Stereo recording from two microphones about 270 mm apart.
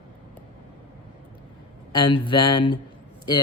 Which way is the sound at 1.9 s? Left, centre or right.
Centre.